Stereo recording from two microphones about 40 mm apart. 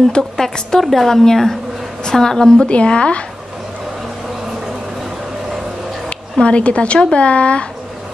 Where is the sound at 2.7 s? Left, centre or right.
Left.